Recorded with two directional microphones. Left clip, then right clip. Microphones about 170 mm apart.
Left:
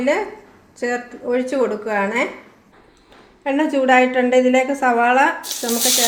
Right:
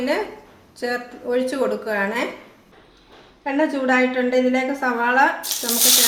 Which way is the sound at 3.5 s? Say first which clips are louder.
Left 4 dB; 50° left (ahead or behind).